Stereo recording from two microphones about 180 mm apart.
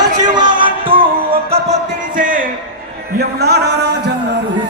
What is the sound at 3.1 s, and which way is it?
Speech, 65° right (ahead or behind).